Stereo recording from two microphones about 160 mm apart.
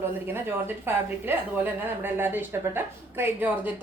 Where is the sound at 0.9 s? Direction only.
15° right (ahead or behind).